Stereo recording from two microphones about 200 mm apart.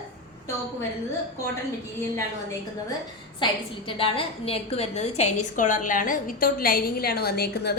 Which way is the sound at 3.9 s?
25° left (ahead or behind).